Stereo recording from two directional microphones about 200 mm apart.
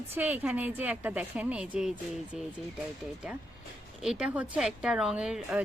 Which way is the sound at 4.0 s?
5° right (ahead or behind).